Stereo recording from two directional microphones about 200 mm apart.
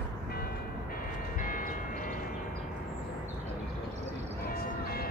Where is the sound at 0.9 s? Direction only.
45° left (ahead or behind).